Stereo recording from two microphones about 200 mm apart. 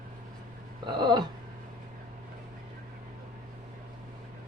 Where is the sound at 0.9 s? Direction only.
20° right (ahead or behind).